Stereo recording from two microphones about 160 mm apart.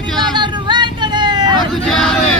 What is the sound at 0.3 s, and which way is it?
Vehicle, 30° right (ahead or behind).